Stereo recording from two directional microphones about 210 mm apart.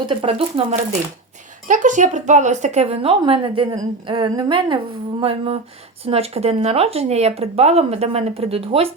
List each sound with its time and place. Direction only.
0.0 s a woman's voice: 25° right (ahead or behind)
1.6 s a woman's voice: 35° right (ahead or behind)